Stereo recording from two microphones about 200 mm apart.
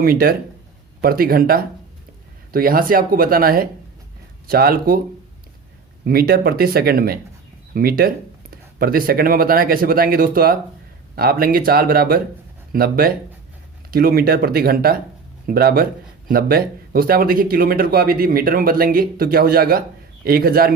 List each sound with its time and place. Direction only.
0.0 s speech: 50° right (ahead or behind)
6.1 s speech: 50° right (ahead or behind)